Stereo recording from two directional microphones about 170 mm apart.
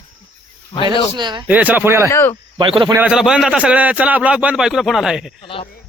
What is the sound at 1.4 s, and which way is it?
Speech, 10° right (ahead or behind).